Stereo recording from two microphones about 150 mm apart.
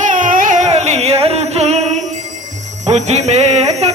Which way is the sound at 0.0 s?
60° right (ahead or behind).